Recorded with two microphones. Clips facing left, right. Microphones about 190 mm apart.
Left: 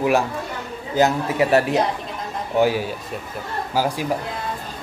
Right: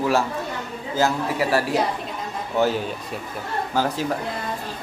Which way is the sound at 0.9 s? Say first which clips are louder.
Left 3 dB; 20° left (ahead or behind).